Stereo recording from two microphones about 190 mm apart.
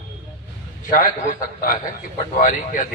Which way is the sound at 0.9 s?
45° left (ahead or behind).